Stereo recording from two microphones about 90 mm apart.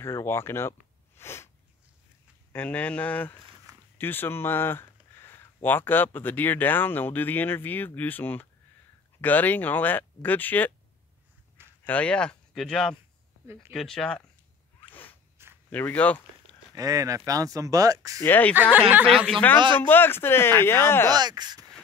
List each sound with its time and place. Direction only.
0.0 s speech: 30° left (ahead or behind)
2.5 s speech: 15° left (ahead or behind)
3.7 s a sound: 40° right (ahead or behind)
4.0 s speech: 25° left (ahead or behind)
11.8 s speech: 15° left (ahead or behind)
15.4 s a sound: 25° right (ahead or behind)
15.7 s speech: 20° left (ahead or behind)
16.7 s speech: 40° right (ahead or behind)
18.2 s speech: 20° left (ahead or behind)
18.5 s speech: 20° right (ahead or behind)
19.0 s speech: centre (ahead or behind)
19.9 s speech: 25° left (ahead or behind)
21.1 s speech: 50° right (ahead or behind)